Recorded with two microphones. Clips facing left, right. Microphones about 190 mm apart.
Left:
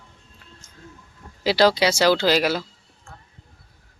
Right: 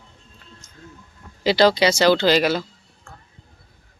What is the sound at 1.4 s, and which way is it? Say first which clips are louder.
Speech: right 2 dB; 5° left (ahead or behind).